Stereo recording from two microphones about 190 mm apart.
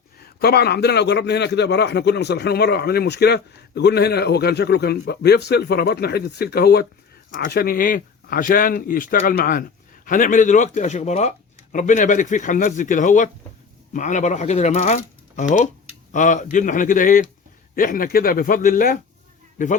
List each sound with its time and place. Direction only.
0.2 s a man's voice: 55° left (ahead or behind)